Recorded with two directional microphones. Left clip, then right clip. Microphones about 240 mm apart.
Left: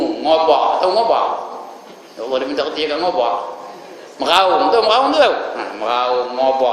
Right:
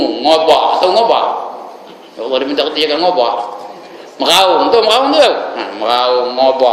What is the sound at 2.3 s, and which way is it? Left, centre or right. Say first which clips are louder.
A man's voice: right 5 dB; centre.